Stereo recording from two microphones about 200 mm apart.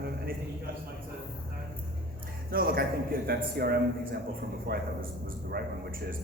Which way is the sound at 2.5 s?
45° right (ahead or behind).